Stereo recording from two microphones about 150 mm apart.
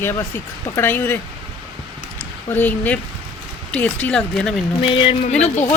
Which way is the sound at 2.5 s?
10° left (ahead or behind).